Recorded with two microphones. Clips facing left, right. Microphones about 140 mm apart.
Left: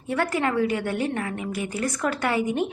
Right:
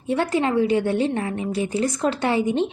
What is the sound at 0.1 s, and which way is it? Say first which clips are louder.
Speech: right 3 dB; 25° right (ahead or behind).